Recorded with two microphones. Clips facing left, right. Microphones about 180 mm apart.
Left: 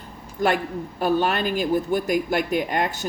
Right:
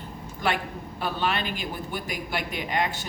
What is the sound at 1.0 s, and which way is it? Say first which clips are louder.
A woman's voice: left 7 dB; 45° left (ahead or behind).